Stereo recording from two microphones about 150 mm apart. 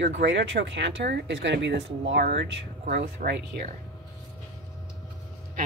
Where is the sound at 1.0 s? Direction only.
90° right.